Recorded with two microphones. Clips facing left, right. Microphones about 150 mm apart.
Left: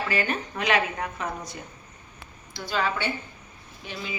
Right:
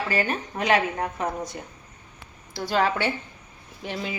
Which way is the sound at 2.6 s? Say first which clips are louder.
Right 4 dB; 75° right (ahead or behind).